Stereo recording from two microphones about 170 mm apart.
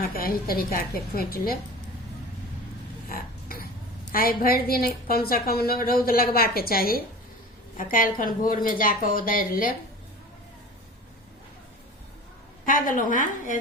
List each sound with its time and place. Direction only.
0.0 s speech: 60° left (ahead or behind)
3.1 s speech: 60° left (ahead or behind)
12.6 s a woman's voice: 50° left (ahead or behind)